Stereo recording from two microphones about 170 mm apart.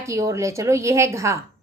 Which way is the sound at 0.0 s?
20° right (ahead or behind).